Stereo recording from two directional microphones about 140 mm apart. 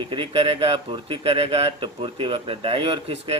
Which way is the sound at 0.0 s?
35° right (ahead or behind).